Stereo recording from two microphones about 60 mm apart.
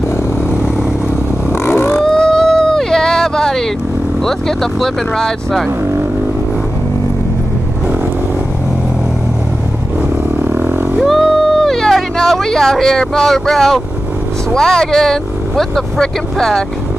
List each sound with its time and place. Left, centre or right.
1.7 s wild animals: left
2.0 s a sound: centre
4.3 s speech: centre
10.4 s wild animals: right
11.0 s a sound: centre
14.5 s speech: centre